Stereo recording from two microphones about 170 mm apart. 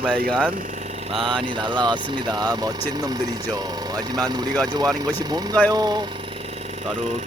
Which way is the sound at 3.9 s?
25° right (ahead or behind).